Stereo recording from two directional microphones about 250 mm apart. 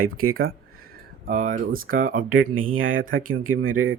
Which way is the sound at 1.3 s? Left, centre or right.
Right.